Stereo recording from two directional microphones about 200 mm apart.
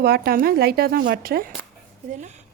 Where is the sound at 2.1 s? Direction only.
35° right (ahead or behind).